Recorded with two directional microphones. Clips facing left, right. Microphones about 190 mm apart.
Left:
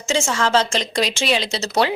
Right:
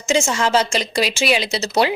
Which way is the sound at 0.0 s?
15° right (ahead or behind).